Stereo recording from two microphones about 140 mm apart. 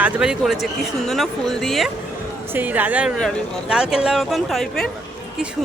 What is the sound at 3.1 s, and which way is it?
Speech, 5° left (ahead or behind).